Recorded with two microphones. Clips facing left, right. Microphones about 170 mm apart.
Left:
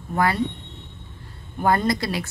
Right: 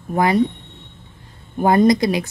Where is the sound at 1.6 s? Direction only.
15° right (ahead or behind).